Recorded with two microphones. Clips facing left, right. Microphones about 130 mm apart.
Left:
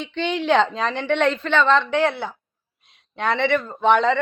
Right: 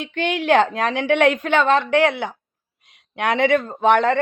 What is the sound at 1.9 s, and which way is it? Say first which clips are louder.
A woman's voice: right 3 dB; 60° right (ahead or behind).